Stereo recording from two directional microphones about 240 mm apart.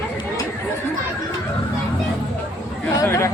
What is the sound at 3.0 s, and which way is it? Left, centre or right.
Chatter, centre.